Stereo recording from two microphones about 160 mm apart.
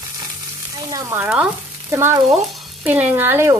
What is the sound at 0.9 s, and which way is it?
Speech, 15° right (ahead or behind).